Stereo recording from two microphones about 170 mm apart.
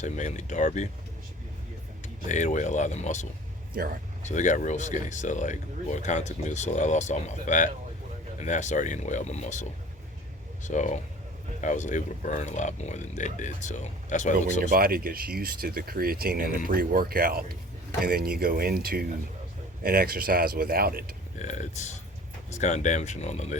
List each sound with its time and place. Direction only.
0.0 s speech: 45° left (ahead or behind)
2.2 s speech: 45° left (ahead or behind)
4.3 s speech: 45° left (ahead or behind)
14.6 s speech: 60° right (ahead or behind)
21.3 s speech: 45° left (ahead or behind)